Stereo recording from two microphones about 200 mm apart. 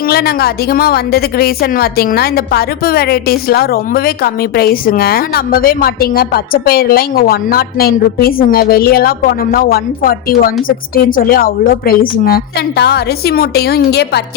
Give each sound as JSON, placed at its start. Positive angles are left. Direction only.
{"t": 0.0, "sound": "a woman's voice", "side_deg": 50}